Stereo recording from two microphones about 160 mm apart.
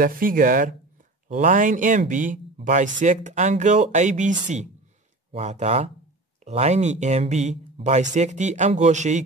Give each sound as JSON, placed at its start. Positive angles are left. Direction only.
{"t": 0.0, "sound": "speech", "side_deg": -60}